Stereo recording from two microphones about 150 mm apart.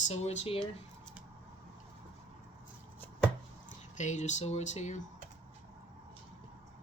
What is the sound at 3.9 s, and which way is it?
Speech, 55° left (ahead or behind).